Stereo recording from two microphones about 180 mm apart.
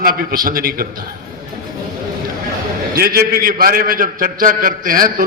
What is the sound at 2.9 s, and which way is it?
A man's voice, 55° right (ahead or behind).